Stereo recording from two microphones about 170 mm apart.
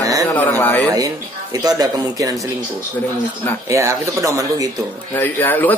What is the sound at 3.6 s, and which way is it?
Speech, 20° right (ahead or behind).